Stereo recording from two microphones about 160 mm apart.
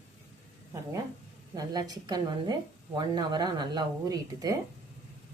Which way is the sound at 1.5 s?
25° right (ahead or behind).